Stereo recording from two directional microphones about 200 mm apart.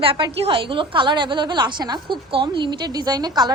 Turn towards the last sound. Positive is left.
turn(degrees=-20)  # may be behind; listen again after turning